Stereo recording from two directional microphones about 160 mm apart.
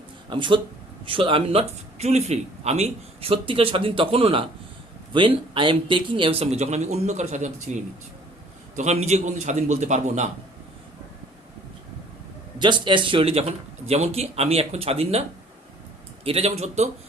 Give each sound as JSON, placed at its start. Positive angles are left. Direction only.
{"t": 0.3, "sound": "a man's voice", "side_deg": -30}
{"t": 12.5, "sound": "speech", "side_deg": -30}
{"t": 16.2, "sound": "speech", "side_deg": -40}